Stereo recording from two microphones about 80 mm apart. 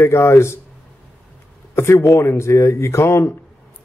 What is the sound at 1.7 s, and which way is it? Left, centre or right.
A man's voice, left.